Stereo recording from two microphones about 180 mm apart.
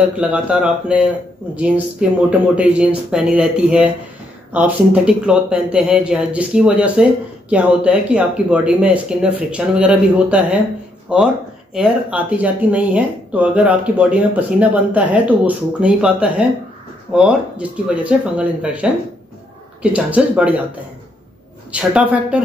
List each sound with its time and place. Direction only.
0.1 s a man's voice: 5° right (ahead or behind)
21.7 s speech: 5° right (ahead or behind)